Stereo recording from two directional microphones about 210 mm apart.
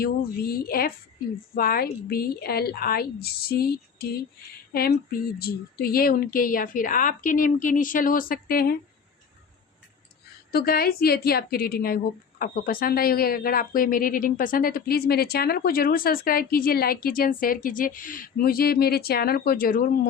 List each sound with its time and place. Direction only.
0.0 s speech: 45° left (ahead or behind)
4.7 s a sound: 45° left (ahead or behind)
5.4 s speech: 45° left (ahead or behind)
10.5 s speech: 45° left (ahead or behind)